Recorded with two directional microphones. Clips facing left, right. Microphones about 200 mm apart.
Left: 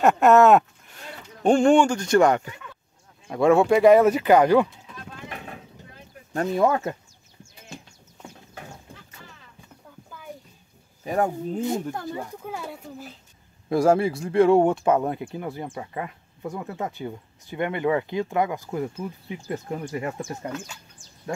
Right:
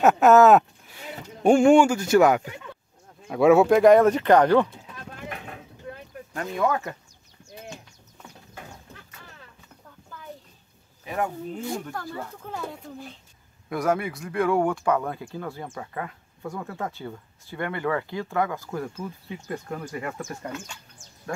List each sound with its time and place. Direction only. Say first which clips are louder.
0.0 s speech: even; centre (ahead or behind)
6.3 s speech: left 7 dB; 35° left (ahead or behind)
6.6 s speech: left 2 dB; 20° left (ahead or behind)
11.1 s speech: left 5 dB; 40° left (ahead or behind)
11.6 s speech: left 5 dB; 20° left (ahead or behind); by 13.2 s 5° left (ahead or behind)
13.7 s speech: left 6 dB; 30° left (ahead or behind)